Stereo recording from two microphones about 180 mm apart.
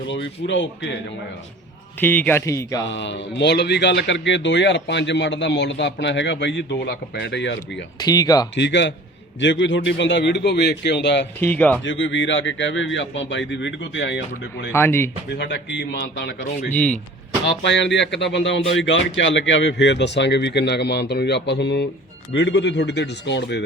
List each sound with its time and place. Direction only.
0.1 s a man's voice: 90° left
2.0 s speech: 10° left (ahead or behind)
2.8 s speech: 85° left
7.9 s speech: 20° left (ahead or behind)
8.5 s a man's voice: 80° left
11.3 s speech: 10° left (ahead or behind)
11.8 s a man's voice: 90° left
14.7 s speech: 15° left (ahead or behind)
15.4 s speech: 75° left (ahead or behind)
16.7 s speech: 5° left (ahead or behind)
17.7 s speech: 80° left